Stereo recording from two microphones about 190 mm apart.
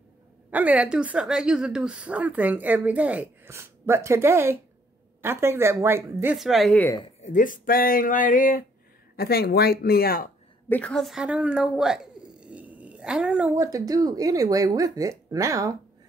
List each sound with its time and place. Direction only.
0.5 s a woman's voice: 10° right (ahead or behind)
6.3 s a woman's voice: centre (ahead or behind)
7.2 s speech: 40° left (ahead or behind)
10.7 s speech: 5° left (ahead or behind); by 15.8 s 15° right (ahead or behind)